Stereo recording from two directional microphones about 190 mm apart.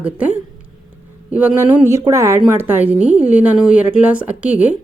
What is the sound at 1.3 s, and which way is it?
A woman's voice, 5° right (ahead or behind).